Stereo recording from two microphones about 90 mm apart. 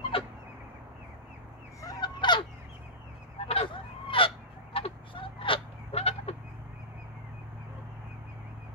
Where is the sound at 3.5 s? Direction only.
80° left.